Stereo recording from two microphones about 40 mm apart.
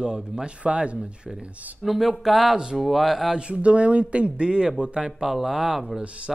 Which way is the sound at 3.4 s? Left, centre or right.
Right.